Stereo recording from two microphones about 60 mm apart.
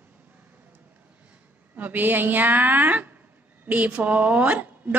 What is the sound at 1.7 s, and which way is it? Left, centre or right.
A woman's voice, right.